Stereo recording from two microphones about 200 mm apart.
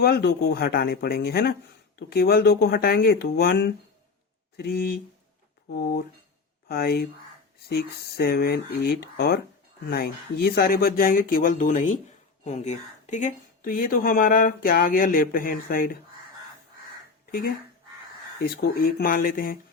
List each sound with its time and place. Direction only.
0.0 s speech: 55° left (ahead or behind)
18.4 s speech: 50° left (ahead or behind)